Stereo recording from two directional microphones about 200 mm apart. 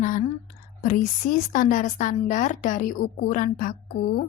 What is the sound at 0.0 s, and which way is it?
A woman's voice, 40° left (ahead or behind).